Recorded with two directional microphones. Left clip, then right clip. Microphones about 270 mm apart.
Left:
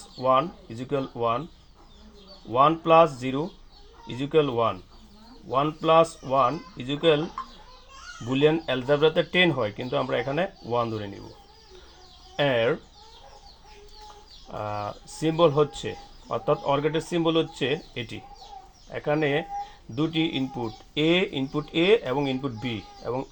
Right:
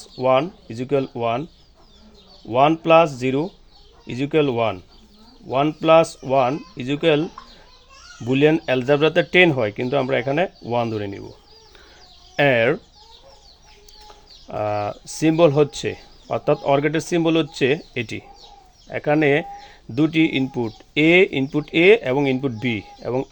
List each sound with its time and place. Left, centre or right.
0.2 s speech: right
2.5 s speech: right
8.2 s speech: right
12.4 s speech: right
14.4 s speech: right